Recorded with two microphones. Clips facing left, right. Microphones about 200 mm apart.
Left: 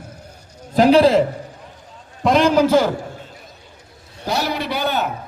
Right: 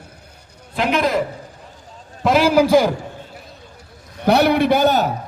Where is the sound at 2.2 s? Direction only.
5° right (ahead or behind).